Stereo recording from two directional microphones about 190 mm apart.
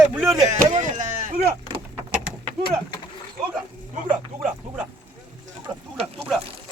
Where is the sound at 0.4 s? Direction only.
40° right (ahead or behind).